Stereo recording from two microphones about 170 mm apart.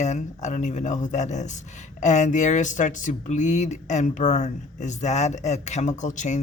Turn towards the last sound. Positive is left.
turn(degrees=45)  # may be behind; listen again after turning